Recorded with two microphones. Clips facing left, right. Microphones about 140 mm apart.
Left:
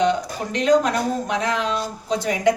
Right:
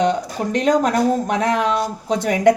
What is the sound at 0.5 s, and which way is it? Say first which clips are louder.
A woman's voice: right 1 dB; 45° right (ahead or behind).